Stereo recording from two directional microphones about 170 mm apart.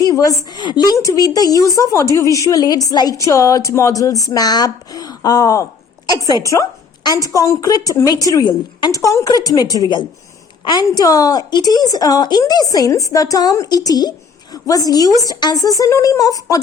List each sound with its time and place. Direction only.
0.0 s a woman's voice: 20° left (ahead or behind)